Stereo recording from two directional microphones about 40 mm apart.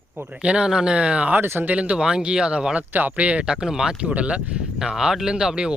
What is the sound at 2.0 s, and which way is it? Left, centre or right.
Speech, right.